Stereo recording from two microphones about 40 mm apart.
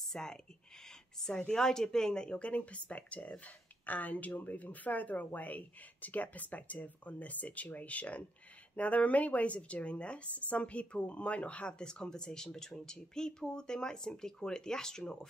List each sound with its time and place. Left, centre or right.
0.0 s speech: centre
0.8 s a sound: centre
1.5 s speech: centre
2.3 s speech: left
11.8 s speech: centre